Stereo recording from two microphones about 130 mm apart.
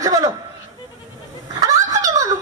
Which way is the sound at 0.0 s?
30° right (ahead or behind).